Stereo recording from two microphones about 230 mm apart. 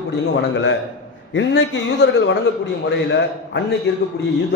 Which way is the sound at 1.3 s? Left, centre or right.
Left.